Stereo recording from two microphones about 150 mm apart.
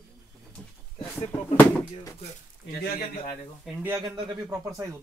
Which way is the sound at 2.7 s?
80° left.